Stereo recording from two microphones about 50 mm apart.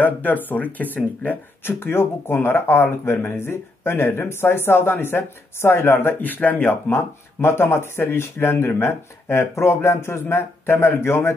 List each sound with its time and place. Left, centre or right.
0.0 s speech: left
1.6 s speech: left
6.9 s speech: left